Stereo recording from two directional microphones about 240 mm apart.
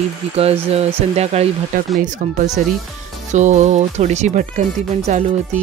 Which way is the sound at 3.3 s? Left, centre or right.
Right.